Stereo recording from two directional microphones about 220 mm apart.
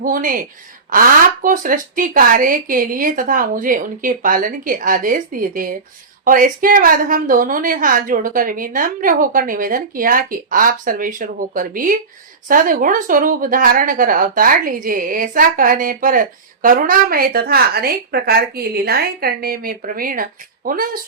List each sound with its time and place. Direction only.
0.0 s a woman's voice: 40° right (ahead or behind)